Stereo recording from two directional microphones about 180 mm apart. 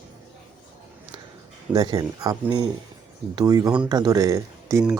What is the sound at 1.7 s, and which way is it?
Speech, 20° right (ahead or behind).